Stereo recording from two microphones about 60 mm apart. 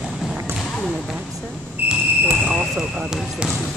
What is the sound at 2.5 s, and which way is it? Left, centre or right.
Speech, centre.